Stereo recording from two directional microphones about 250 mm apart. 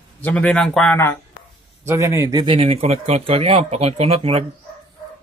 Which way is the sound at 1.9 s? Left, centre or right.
Centre.